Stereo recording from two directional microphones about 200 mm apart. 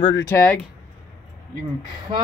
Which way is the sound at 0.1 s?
10° left (ahead or behind).